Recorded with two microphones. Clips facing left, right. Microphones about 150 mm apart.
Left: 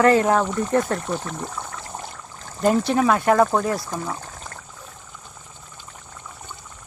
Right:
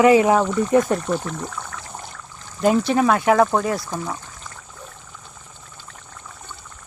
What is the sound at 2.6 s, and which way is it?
Speech, centre (ahead or behind).